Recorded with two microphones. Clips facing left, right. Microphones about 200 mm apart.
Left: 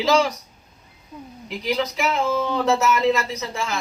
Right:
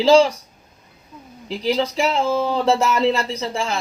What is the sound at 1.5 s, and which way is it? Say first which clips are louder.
Speech: right 4 dB; 30° right (ahead or behind).